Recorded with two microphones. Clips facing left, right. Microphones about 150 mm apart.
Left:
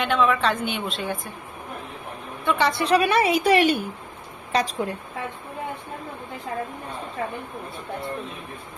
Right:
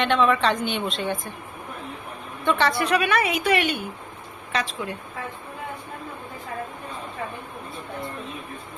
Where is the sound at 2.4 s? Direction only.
15° left (ahead or behind).